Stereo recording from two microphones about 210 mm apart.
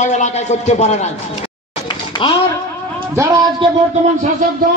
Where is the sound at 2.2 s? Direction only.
25° left (ahead or behind).